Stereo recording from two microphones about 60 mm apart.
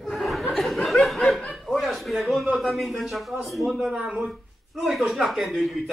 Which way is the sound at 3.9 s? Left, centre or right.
Centre.